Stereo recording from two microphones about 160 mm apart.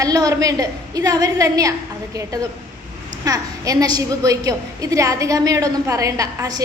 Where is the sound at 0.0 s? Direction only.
20° right (ahead or behind).